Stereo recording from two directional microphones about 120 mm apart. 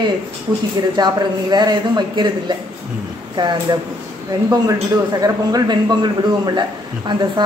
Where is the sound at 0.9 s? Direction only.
35° right (ahead or behind).